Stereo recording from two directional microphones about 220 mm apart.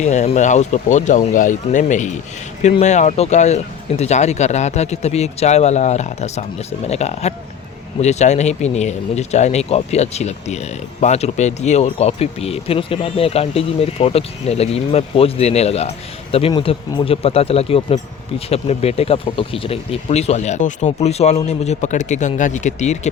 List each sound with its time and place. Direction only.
0.0 s speech: 30° left (ahead or behind)